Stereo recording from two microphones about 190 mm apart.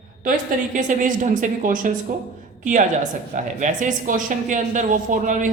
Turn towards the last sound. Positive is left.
turn(degrees=-40)  # may be behind; listen again after turning